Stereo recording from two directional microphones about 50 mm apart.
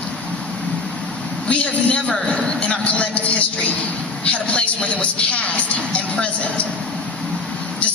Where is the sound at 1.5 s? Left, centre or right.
Left.